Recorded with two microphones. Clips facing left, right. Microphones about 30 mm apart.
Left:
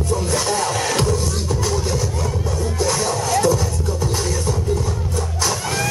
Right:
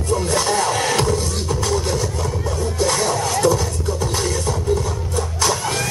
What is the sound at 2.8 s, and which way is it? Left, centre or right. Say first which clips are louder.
Music: right 2 dB; centre.